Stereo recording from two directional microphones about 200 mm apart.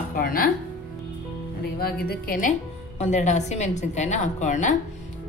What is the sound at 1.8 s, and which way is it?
A woman's voice, 45° left (ahead or behind).